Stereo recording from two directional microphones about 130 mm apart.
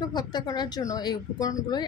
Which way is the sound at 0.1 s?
30° left (ahead or behind).